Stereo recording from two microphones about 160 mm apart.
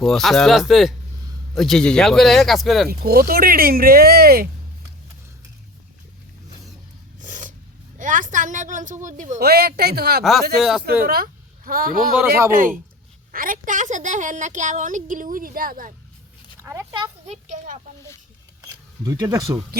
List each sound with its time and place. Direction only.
0.0 s speech: centre (ahead or behind)
3.0 s speech: 70° right (ahead or behind)
7.2 s filing: 55° right (ahead or behind)
7.9 s a woman's voice: 55° right (ahead or behind)
9.4 s speech: 75° right (ahead or behind)
10.6 s speech: centre (ahead or behind)
11.0 s a woman's voice: 65° right (ahead or behind)
16.6 s a sound: 20° right (ahead or behind)
19.0 s speech: 25° right (ahead or behind)